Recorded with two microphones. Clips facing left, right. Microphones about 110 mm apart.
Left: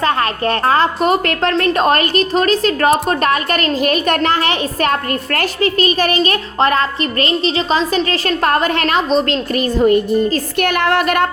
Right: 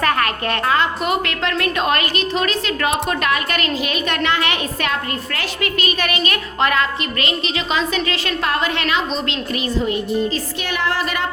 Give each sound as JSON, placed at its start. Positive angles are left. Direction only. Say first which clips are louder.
{"t": 0.0, "sound": "a woman's voice", "louder": "left 3 dB", "side_deg": 30}